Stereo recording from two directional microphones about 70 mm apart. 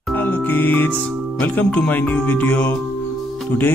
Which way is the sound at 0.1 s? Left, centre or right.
Left.